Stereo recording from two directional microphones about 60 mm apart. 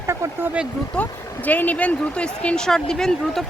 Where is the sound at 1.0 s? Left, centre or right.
Left.